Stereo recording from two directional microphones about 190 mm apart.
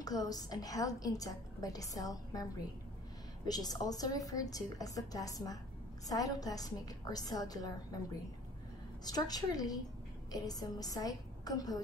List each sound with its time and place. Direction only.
0.0 s a woman's voice: 20° left (ahead or behind)
3.4 s a woman's voice: 20° left (ahead or behind)
9.0 s a woman's voice: 20° left (ahead or behind)